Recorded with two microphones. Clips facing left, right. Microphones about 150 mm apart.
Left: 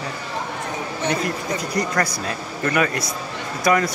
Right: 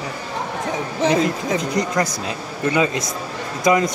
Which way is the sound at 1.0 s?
90° right.